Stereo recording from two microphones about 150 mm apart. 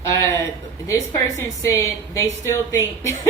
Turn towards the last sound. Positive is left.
turn(degrees=20)  # may be behind; listen again after turning